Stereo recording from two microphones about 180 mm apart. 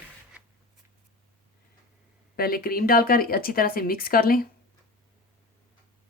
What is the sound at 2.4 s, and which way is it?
Speech, 55° left (ahead or behind).